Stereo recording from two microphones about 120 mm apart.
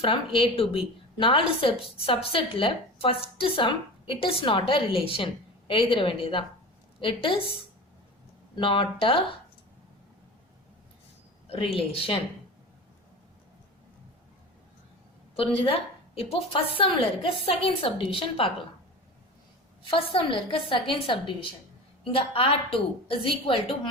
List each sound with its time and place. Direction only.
0.0 s a woman's voice: 45° left (ahead or behind)
8.5 s a woman's voice: 45° left (ahead or behind)
11.4 s a woman's voice: 50° left (ahead or behind)
15.4 s a woman's voice: 50° left (ahead or behind)
19.8 s a woman's voice: 50° left (ahead or behind)